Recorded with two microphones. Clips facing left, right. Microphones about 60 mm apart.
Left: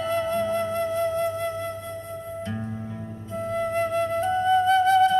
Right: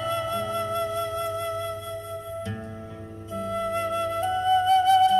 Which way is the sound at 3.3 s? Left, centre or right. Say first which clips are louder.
Left 1 dB; left.